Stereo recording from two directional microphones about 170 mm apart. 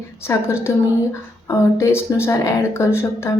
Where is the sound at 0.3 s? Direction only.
15° left (ahead or behind).